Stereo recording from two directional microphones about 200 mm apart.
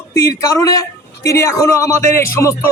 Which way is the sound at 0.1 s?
15° left (ahead or behind).